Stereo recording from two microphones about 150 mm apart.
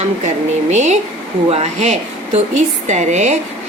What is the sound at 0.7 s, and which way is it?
Speech, 50° right (ahead or behind).